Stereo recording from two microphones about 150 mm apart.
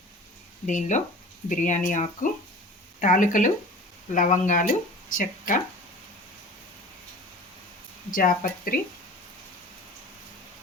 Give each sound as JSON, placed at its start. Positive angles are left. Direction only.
{"t": 0.7, "sound": "speech", "side_deg": 55}
{"t": 8.1, "sound": "speech", "side_deg": 65}